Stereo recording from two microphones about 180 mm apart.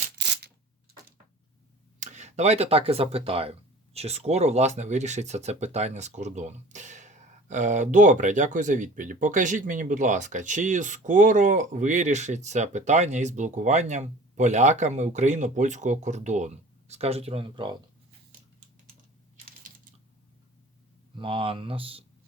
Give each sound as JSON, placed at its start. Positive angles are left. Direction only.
{"t": 2.0, "sound": "speech", "side_deg": -40}
{"t": 21.2, "sound": "speech", "side_deg": -30}